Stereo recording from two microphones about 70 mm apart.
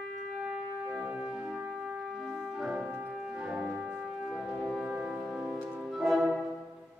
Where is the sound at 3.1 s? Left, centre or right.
Centre.